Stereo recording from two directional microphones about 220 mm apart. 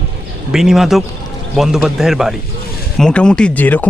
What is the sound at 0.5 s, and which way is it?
Speech, centre (ahead or behind).